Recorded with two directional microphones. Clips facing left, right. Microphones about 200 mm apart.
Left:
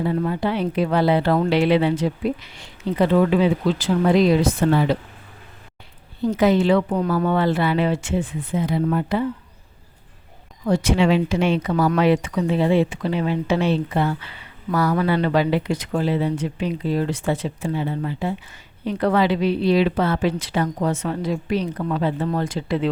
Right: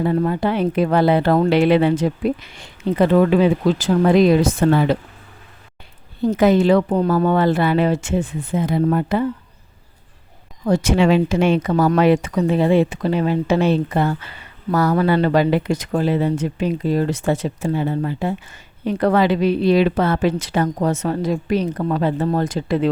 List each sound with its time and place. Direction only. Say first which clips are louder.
0.0 s speech: right 3 dB; 50° right (ahead or behind)
6.2 s speech: right 3 dB; 50° right (ahead or behind)
10.7 s speech: right 3 dB; 45° right (ahead or behind)